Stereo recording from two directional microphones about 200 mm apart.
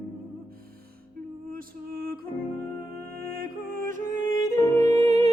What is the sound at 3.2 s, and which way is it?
Music, 45° right (ahead or behind).